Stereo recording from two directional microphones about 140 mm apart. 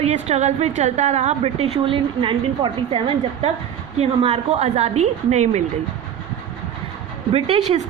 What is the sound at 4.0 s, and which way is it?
A woman's voice, 45° right (ahead or behind).